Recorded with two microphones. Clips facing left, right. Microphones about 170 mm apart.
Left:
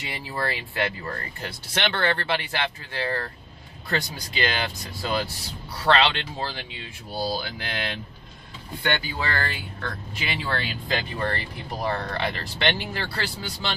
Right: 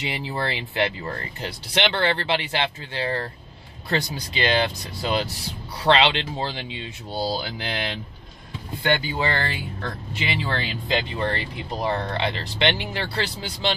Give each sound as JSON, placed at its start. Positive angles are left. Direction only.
{"t": 0.0, "sound": "speech", "side_deg": -20}
{"t": 5.0, "sound": "speech", "side_deg": -20}